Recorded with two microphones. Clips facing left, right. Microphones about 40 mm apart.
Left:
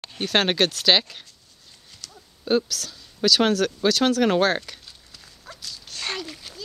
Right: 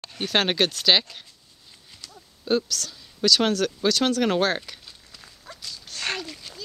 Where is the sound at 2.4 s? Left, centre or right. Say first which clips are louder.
Left 2 dB; centre.